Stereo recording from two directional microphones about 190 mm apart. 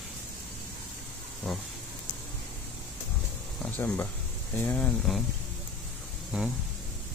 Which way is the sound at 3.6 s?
10° left (ahead or behind).